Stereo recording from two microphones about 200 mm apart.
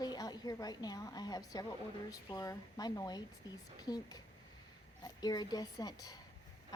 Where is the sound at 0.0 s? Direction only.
20° left (ahead or behind).